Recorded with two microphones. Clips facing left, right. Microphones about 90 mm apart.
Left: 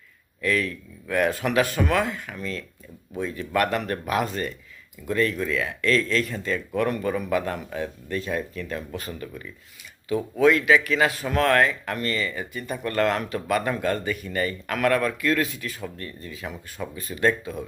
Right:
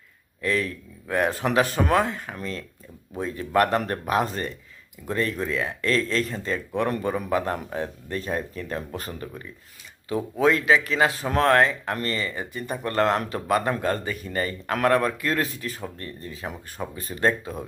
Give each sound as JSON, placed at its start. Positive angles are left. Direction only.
{"t": 0.4, "sound": "speech", "side_deg": -30}